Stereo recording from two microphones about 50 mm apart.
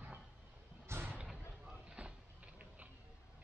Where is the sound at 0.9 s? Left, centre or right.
Right.